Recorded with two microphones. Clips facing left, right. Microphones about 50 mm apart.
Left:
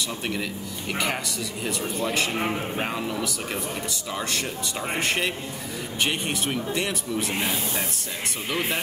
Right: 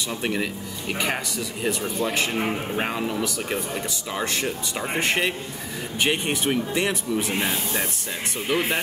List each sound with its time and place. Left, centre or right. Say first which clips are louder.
0.2 s speech: right 3 dB; centre
8.5 s speech: right 4 dB; centre